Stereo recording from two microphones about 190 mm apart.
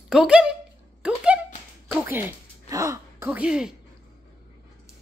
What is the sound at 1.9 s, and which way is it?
Speech, 10° right (ahead or behind).